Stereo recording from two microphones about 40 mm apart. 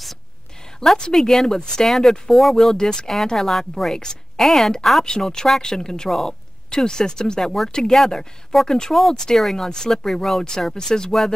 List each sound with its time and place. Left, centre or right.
0.8 s a woman's voice: centre
3.9 s speech: centre
5.0 s speech: centre
8.9 s a woman's voice: centre